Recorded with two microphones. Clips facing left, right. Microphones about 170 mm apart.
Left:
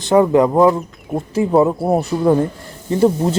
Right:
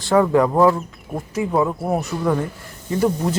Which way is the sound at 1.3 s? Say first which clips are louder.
Left 6 dB; 30° left (ahead or behind).